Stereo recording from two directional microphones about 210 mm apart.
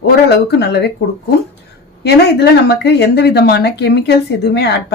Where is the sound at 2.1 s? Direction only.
50° left (ahead or behind).